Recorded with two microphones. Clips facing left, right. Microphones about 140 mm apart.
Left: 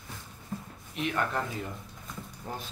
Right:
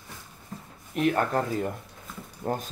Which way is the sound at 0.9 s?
45° right (ahead or behind).